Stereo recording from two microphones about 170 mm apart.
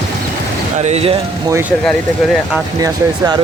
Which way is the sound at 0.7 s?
40° right (ahead or behind).